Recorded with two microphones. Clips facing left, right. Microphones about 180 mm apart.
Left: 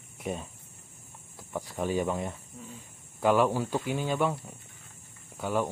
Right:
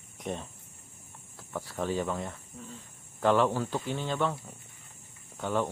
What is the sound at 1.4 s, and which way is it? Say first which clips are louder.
Speech: left 1 dB; 15° left (ahead or behind).